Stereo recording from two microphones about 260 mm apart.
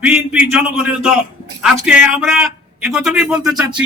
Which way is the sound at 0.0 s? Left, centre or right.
Centre.